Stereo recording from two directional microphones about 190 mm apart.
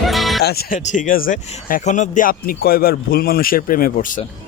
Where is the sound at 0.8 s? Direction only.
40° left (ahead or behind).